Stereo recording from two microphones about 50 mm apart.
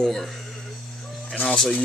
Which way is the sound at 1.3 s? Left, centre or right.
Left.